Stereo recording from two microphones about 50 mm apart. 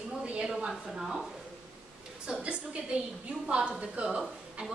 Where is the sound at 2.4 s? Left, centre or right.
Right.